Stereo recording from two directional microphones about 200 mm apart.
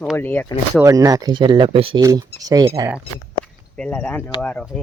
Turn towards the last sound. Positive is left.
turn(degrees=5)  # may be behind; listen again after turning